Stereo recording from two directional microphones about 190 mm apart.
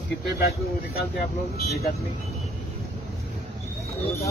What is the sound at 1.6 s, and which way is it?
Speech, 55° left (ahead or behind).